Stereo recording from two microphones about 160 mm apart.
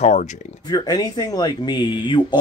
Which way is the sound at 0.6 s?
25° left (ahead or behind).